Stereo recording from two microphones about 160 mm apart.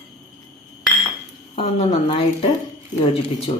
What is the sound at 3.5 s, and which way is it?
Speech, 35° left (ahead or behind).